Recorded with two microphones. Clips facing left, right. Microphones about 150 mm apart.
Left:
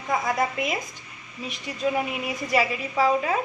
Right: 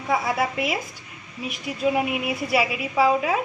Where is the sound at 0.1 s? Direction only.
5° right (ahead or behind).